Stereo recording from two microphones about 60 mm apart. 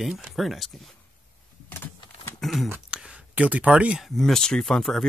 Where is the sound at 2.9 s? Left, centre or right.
Centre.